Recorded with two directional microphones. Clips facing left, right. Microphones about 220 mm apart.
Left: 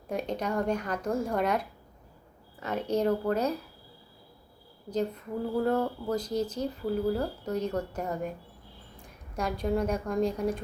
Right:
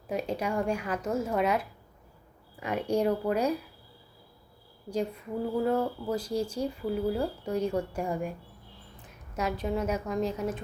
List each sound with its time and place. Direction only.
0.1 s speech: 5° right (ahead or behind)
4.9 s a woman's voice: 10° right (ahead or behind)